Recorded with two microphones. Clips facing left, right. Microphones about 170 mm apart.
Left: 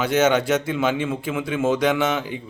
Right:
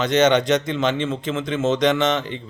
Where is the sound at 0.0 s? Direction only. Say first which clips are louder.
Right 2 dB; 10° left (ahead or behind).